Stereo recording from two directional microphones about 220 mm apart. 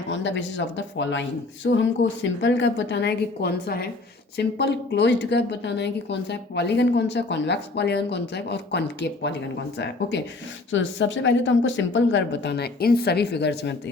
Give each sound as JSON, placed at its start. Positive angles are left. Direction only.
{"t": 0.1, "sound": "a woman's voice", "side_deg": 55}